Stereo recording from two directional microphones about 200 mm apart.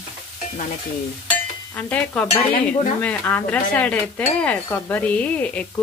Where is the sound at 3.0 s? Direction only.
10° left (ahead or behind).